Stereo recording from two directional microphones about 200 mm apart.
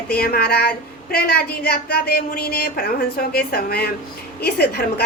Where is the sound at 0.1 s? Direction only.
50° left (ahead or behind).